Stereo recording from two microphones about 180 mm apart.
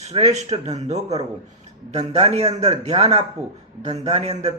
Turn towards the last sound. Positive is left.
turn(degrees=-35)  # may be behind; listen again after turning